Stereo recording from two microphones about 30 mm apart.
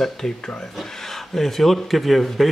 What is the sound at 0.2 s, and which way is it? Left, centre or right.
Speech, centre.